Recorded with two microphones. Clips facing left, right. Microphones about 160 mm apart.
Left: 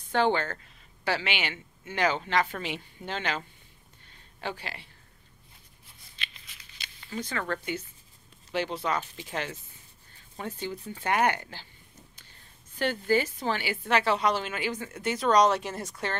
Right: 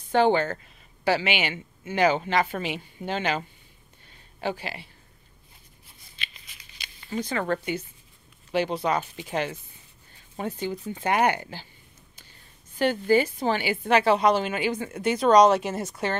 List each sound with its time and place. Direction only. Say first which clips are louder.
0.1 s a woman's voice: right 5 dB; 15° right (ahead or behind)
6.1 s a sound: right 1 dB; 10° right (ahead or behind)
7.2 s a woman's voice: right 5 dB; 20° right (ahead or behind)
12.7 s a woman's voice: right 5 dB; 15° right (ahead or behind)